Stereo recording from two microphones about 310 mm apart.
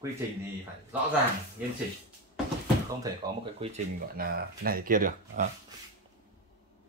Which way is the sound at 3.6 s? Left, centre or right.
Right.